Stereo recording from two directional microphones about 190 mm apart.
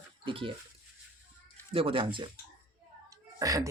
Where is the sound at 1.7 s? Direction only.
30° right (ahead or behind).